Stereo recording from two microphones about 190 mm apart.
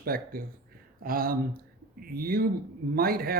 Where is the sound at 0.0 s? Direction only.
50° right (ahead or behind).